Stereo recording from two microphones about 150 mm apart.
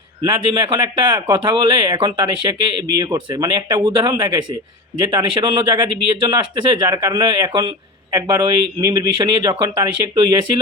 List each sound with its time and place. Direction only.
0.3 s speech: 35° right (ahead or behind)